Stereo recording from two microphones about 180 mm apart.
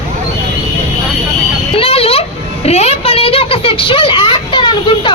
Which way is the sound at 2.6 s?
35° left (ahead or behind).